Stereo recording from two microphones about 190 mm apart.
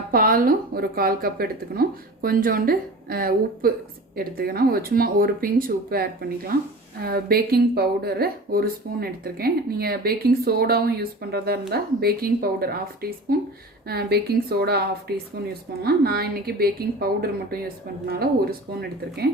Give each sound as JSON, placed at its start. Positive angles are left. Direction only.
{"t": 0.1, "sound": "a woman's voice", "side_deg": -50}